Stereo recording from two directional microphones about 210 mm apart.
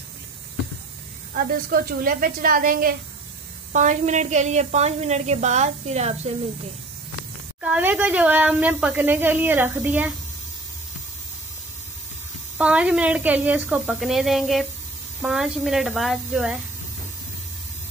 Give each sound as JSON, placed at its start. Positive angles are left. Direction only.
{"t": 1.3, "sound": "a woman's voice", "side_deg": -45}
{"t": 7.6, "sound": "speech", "side_deg": -5}
{"t": 12.5, "sound": "speech", "side_deg": -5}